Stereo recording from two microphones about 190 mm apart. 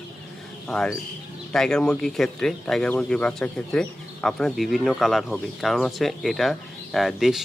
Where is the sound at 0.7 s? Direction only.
5° left (ahead or behind).